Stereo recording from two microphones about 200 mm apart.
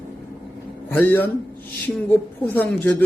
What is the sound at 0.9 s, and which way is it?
A man's voice, 10° left (ahead or behind).